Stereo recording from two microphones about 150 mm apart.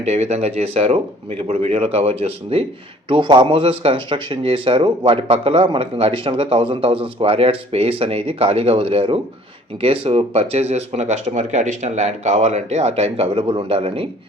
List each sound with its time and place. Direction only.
0.1 s speech: 45° right (ahead or behind)